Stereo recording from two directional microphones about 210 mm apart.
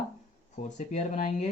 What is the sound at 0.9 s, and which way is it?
Speech, 35° left (ahead or behind).